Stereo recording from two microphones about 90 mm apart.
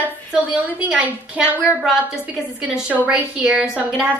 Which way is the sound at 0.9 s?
10° right (ahead or behind).